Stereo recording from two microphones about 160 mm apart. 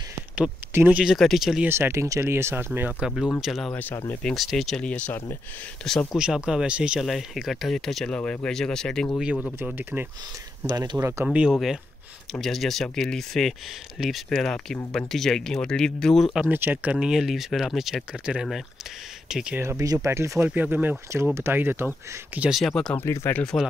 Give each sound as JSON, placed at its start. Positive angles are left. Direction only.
{"t": 0.4, "sound": "speech", "side_deg": -10}
{"t": 1.7, "sound": "speech", "side_deg": -15}
{"t": 3.3, "sound": "speech", "side_deg": 0}
{"t": 3.7, "sound": "speech", "side_deg": 10}
{"t": 9.2, "sound": "speech", "side_deg": -5}
{"t": 10.6, "sound": "speech", "side_deg": -20}
{"t": 11.2, "sound": "speech", "side_deg": -5}
{"t": 16.3, "sound": "speech", "side_deg": -10}
{"t": 19.6, "sound": "speech", "side_deg": -20}
{"t": 23.0, "sound": "speech", "side_deg": 15}